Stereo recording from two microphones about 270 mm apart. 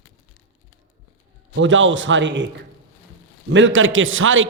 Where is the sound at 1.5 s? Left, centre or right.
Right.